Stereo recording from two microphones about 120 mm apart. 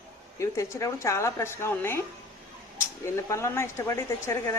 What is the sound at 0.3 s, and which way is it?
Speech, 25° left (ahead or behind).